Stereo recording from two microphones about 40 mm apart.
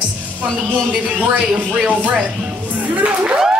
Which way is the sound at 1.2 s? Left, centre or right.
Right.